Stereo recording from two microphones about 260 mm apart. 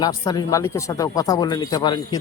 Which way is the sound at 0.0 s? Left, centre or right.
Centre.